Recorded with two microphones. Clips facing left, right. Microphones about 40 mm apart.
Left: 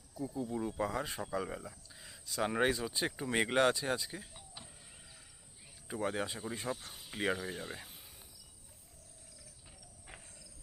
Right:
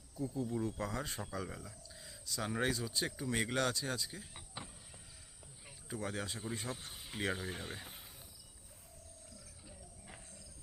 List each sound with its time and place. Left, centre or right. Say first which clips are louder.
0.1 s speech: even; centre
4.4 s power windows: right 3 dB; right
5.9 s speech: left 5 dB; centre
6.7 s speech: left 2 dB; centre